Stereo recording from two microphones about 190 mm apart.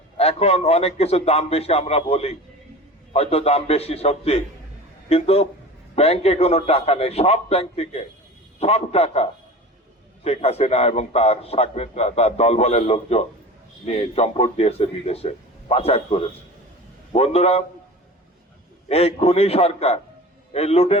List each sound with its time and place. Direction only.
0.2 s a man's voice: 30° left (ahead or behind)
17.1 s a man's voice: 35° left (ahead or behind)
18.9 s a man's voice: 30° left (ahead or behind)